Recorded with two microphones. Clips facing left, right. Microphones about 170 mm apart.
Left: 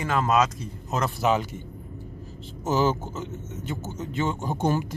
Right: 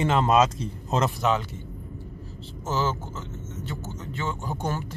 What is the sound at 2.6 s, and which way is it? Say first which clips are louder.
Speech: left 4 dB; 15° left (ahead or behind).